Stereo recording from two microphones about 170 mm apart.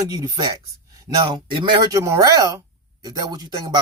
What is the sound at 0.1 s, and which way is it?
Speech, 20° right (ahead or behind).